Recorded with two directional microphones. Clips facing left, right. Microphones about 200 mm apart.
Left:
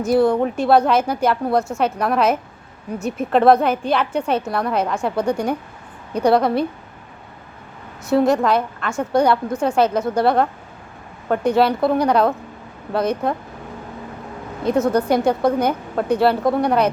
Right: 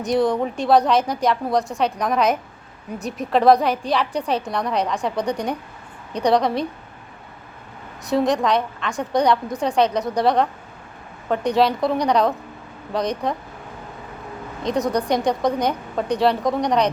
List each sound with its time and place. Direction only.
0.0 s a woman's voice: 5° left (ahead or behind)
8.1 s a woman's voice: 5° left (ahead or behind)
14.8 s a woman's voice: 5° left (ahead or behind)